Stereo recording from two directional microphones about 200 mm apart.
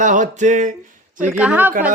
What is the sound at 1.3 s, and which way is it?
Speech, 5° right (ahead or behind).